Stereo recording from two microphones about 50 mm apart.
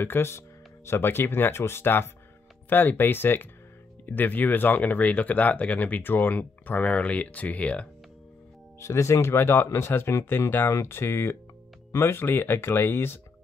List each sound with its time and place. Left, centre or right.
0.0 s speech: left
2.7 s speech: left
8.7 s speech: left